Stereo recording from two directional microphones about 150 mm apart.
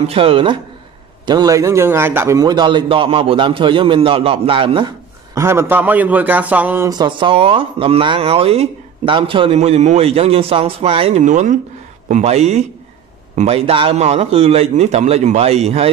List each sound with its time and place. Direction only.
0.0 s speech: 40° right (ahead or behind)
5.3 s a man's voice: 15° right (ahead or behind)
6.9 s a man's voice: 30° right (ahead or behind)